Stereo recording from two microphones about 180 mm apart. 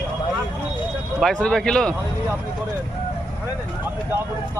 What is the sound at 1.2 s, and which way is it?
Speech, 5° left (ahead or behind).